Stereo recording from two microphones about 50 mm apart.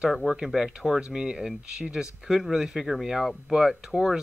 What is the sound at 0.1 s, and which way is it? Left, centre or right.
Speech, centre.